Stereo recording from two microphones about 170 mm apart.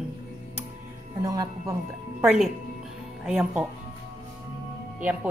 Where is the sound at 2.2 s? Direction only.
Centre (ahead or behind).